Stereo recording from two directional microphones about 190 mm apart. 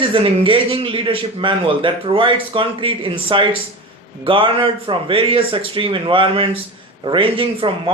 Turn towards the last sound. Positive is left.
turn(degrees=-30)  # may be behind; listen again after turning